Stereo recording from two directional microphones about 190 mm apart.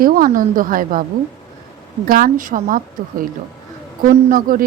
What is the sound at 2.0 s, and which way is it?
Speech, 50° right (ahead or behind).